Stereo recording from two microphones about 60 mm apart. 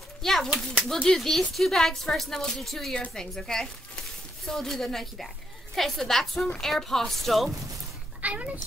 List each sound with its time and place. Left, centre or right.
0.2 s a child's voice: centre
8.2 s a child's voice: right